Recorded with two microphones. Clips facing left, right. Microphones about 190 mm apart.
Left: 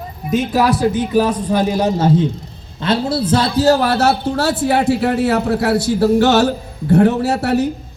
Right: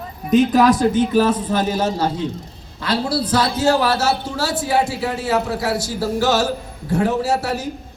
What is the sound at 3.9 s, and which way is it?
A man's voice, 60° left (ahead or behind).